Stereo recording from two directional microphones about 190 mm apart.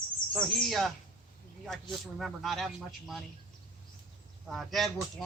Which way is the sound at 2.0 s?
Centre (ahead or behind).